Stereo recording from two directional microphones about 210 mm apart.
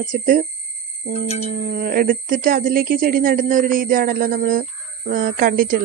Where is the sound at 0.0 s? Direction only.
40° right (ahead or behind).